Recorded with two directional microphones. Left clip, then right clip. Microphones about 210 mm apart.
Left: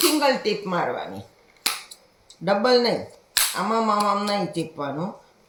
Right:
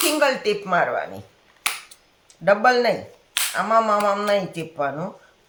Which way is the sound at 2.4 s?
45° right (ahead or behind).